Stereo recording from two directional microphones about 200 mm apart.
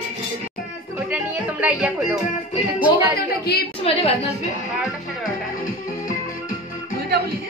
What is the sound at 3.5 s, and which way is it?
Speech, 55° left (ahead or behind).